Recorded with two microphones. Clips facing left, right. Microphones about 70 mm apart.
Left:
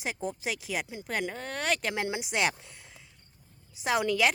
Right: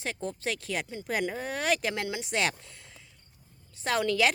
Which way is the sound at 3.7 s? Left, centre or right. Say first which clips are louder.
Even; centre.